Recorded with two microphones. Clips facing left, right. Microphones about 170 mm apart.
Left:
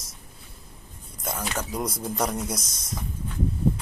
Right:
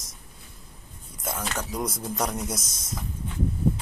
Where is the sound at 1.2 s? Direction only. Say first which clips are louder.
Left 1 dB; centre (ahead or behind).